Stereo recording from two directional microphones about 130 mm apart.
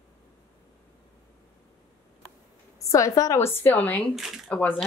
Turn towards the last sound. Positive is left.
turn(degrees=10)  # may be behind; listen again after turning